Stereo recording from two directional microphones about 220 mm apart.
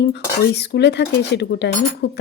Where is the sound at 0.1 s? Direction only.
50° left (ahead or behind).